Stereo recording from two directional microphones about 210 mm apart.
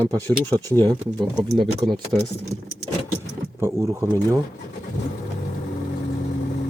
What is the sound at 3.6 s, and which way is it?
Speech, 15° right (ahead or behind).